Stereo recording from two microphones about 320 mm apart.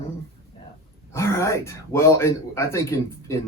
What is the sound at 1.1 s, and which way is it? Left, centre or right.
Speech, centre.